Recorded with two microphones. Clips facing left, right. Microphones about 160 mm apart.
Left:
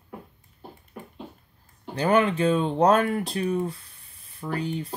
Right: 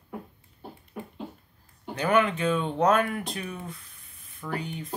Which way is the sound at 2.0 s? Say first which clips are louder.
Left 3 dB; 35° left (ahead or behind).